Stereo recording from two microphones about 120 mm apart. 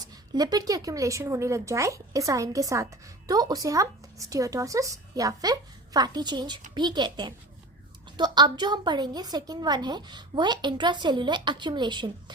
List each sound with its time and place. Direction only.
0.0 s a woman's voice: 30° right (ahead or behind)